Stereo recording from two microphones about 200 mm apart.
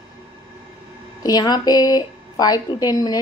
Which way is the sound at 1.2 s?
20° left (ahead or behind).